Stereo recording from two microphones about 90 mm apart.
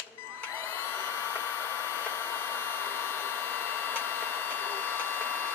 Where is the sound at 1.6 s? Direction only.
25° left (ahead or behind).